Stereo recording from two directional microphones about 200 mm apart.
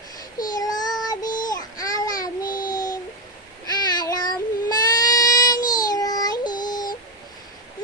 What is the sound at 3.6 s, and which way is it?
Child singing, 20° left (ahead or behind).